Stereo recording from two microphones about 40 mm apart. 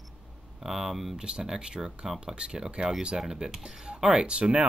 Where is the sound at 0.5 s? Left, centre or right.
Centre.